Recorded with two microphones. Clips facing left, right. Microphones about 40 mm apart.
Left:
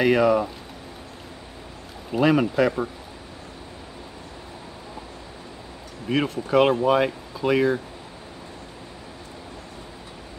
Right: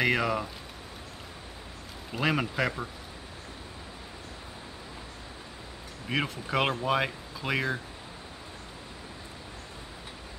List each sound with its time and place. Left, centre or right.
0.0 s speech: centre
2.1 s speech: centre
6.0 s speech: centre